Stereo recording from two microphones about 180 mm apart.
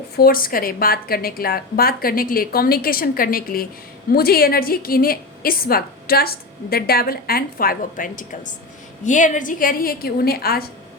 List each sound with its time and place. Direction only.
0.2 s a woman's voice: 55° left (ahead or behind)